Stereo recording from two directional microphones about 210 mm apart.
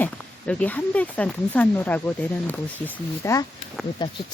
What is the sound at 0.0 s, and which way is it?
Speech, 5° left (ahead or behind).